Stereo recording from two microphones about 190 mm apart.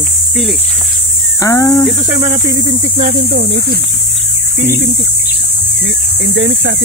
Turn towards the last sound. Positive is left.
turn(degrees=-65)  # may be behind; listen again after turning